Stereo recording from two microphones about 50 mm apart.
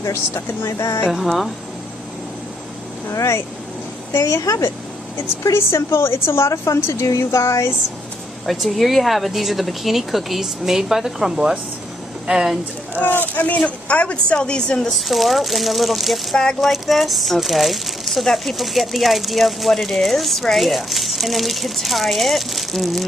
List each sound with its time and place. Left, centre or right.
1.0 s speech: centre
3.1 s speech: left
4.1 s speech: left
5.1 s a woman's voice: left
6.9 s speech: left
8.5 s speech: centre
13.0 s a woman's voice: left; by 14.9 s centre
14.9 s speech: centre
16.3 s speech: centre
16.7 s speech: centre